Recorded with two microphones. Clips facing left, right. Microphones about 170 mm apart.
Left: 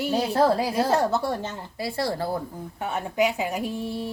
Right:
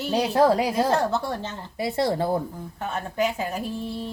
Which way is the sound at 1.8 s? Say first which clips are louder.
Right 4 dB; 20° right (ahead or behind).